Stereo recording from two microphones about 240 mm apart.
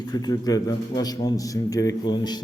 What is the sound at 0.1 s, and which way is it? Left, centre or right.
A man's voice, centre.